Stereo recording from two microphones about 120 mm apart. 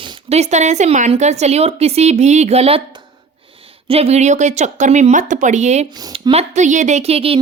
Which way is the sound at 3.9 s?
60° right (ahead or behind).